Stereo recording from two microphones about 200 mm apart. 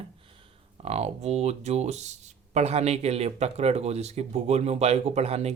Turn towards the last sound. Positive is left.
turn(degrees=-30)  # may be behind; listen again after turning